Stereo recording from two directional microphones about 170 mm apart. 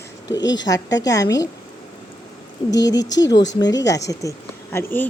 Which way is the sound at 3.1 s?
90° left.